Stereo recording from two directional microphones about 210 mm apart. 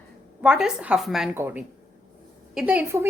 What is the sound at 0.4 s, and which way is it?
A woman's voice, 5° right (ahead or behind).